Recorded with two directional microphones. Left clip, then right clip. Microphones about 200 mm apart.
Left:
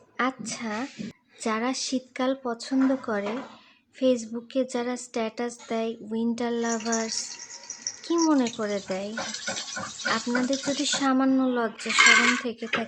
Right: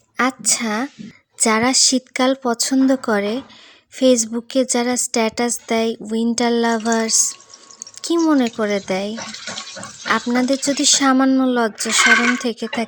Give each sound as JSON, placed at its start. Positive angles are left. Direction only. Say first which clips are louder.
{"t": 0.2, "sound": "a woman's voice", "louder": "right 10 dB", "side_deg": -40}